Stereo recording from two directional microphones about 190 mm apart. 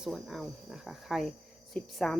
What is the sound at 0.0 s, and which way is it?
Speech, centre (ahead or behind).